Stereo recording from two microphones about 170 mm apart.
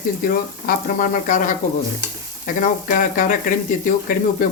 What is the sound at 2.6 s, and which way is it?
Speech, 55° left (ahead or behind).